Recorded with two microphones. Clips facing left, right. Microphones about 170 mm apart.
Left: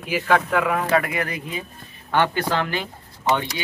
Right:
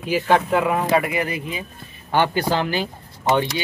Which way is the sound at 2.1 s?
30° right (ahead or behind).